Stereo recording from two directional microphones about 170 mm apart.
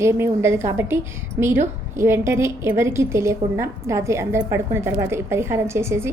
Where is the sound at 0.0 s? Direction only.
15° right (ahead or behind).